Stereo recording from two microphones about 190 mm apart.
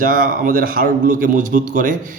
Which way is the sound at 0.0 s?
45° right (ahead or behind).